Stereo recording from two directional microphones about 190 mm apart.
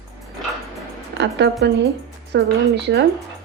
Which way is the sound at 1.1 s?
65° right (ahead or behind).